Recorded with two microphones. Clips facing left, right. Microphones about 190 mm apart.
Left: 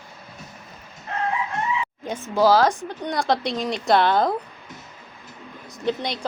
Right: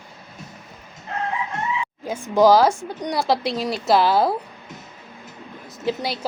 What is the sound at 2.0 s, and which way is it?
Speech, 10° right (ahead or behind).